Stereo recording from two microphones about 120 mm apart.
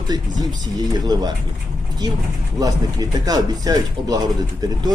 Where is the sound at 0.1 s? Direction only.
35° right (ahead or behind).